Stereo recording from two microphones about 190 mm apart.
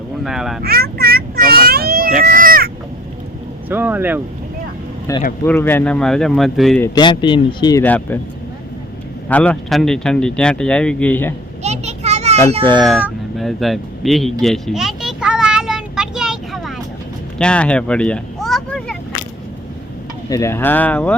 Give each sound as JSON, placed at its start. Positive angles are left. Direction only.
{"t": 0.2, "sound": "speech", "side_deg": 0}
{"t": 0.6, "sound": "child singing", "side_deg": -55}
{"t": 2.2, "sound": "cat", "side_deg": -50}
{"t": 3.7, "sound": "speech", "side_deg": -10}
{"t": 5.1, "sound": "speech", "side_deg": 15}
{"t": 6.8, "sound": "speech", "side_deg": 20}
{"t": 7.9, "sound": "speech", "side_deg": 10}
{"t": 9.3, "sound": "speech", "side_deg": 5}
{"t": 11.6, "sound": "children playing", "side_deg": -35}
{"t": 12.6, "sound": "speech", "side_deg": 5}
{"t": 13.0, "sound": "a sound", "side_deg": -5}
{"t": 20.3, "sound": "speech", "side_deg": 15}